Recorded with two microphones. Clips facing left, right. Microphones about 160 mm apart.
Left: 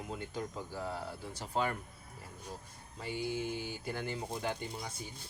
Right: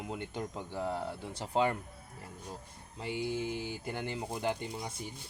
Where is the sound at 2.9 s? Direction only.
20° right (ahead or behind).